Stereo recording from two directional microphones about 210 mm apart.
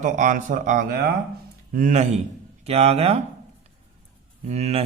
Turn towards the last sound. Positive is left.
turn(degrees=-30)  # may be behind; listen again after turning